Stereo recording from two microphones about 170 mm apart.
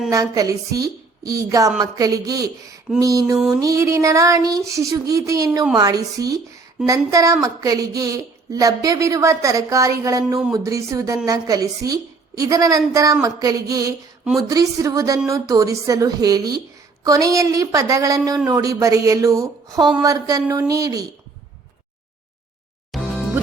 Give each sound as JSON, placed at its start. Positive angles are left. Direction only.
{"t": 0.1, "sound": "a woman's voice", "side_deg": -20}
{"t": 3.3, "sound": "a sound", "side_deg": -5}
{"t": 3.6, "sound": "a woman's voice", "side_deg": -20}
{"t": 22.9, "sound": "music", "side_deg": 0}